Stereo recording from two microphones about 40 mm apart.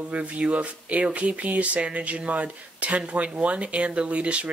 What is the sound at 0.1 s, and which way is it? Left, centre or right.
Speech, right.